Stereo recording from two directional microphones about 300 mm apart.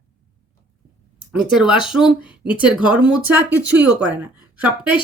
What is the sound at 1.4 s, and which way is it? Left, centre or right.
Speech, centre.